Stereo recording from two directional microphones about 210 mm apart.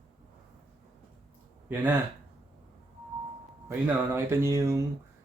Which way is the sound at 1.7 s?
10° right (ahead or behind).